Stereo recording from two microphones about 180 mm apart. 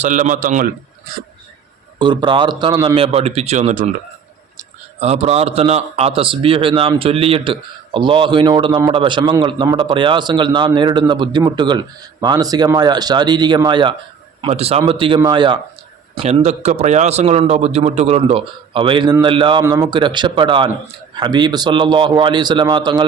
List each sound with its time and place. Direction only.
0.0 s a man's voice: 45° right (ahead or behind)
2.0 s a man's voice: 25° right (ahead or behind)
16.1 s a man's voice: 35° right (ahead or behind)